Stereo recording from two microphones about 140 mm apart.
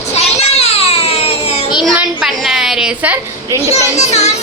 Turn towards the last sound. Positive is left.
turn(degrees=50)  # may be behind; listen again after turning